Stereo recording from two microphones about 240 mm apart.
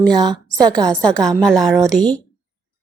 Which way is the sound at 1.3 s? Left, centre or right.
Centre.